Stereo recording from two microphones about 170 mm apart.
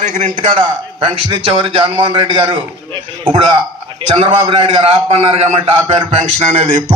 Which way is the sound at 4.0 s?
30° right (ahead or behind).